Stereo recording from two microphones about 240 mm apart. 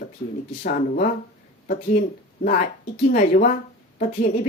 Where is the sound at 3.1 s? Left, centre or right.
Left.